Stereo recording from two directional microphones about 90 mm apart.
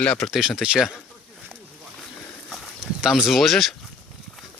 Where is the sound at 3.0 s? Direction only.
5° right (ahead or behind).